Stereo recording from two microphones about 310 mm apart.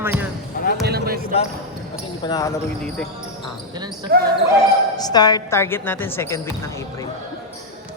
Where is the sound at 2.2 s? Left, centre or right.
Centre.